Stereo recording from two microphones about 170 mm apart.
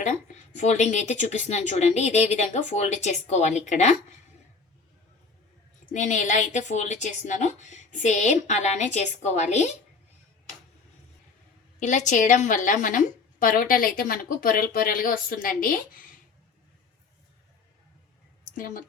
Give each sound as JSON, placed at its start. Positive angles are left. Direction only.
{"t": 0.5, "sound": "a woman's voice", "side_deg": 45}
{"t": 5.9, "sound": "a woman's voice", "side_deg": 45}
{"t": 11.8, "sound": "a woman's voice", "side_deg": 45}
{"t": 18.5, "sound": "a woman's voice", "side_deg": 55}